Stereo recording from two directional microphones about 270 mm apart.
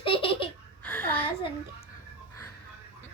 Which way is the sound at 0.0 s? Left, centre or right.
Centre.